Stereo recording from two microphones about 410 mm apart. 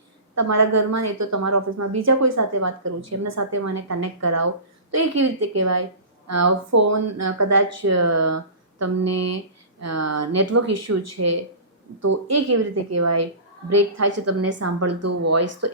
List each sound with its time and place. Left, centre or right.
0.3 s a woman's voice: right